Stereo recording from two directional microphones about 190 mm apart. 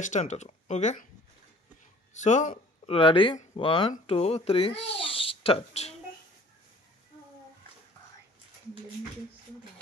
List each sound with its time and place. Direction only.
0.0 s speech: 40° left (ahead or behind)
2.1 s speech: 40° left (ahead or behind)
2.9 s speech: 30° left (ahead or behind)
4.7 s a child's voice: 70° left (ahead or behind)
5.0 s a child's voice: 30° left (ahead or behind)